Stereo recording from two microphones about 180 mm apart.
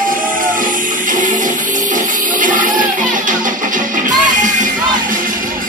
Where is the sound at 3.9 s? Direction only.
45° right (ahead or behind).